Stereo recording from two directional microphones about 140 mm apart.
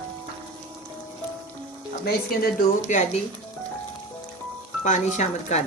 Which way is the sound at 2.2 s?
75° left (ahead or behind).